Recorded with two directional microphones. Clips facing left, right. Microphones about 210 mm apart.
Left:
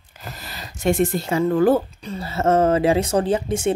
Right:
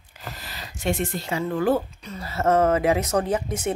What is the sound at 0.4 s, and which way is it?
Speech, 45° left (ahead or behind).